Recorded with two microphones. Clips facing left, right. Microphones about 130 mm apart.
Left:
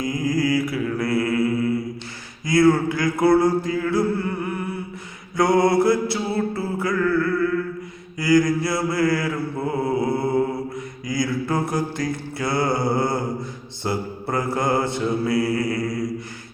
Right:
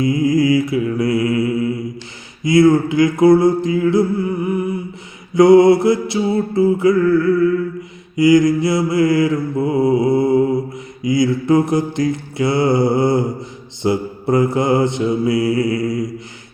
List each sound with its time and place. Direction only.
0.0 s mantra: 25° right (ahead or behind)
8.1 s mantra: 20° right (ahead or behind)